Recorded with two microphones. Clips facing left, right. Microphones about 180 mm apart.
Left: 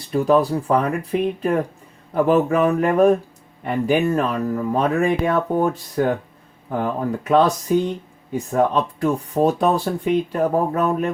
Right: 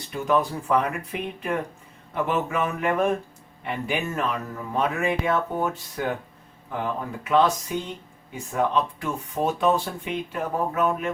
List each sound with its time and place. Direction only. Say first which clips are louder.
0.1 s speech: left 7 dB; 35° left (ahead or behind)
7.3 s speech: left 4 dB; 40° left (ahead or behind)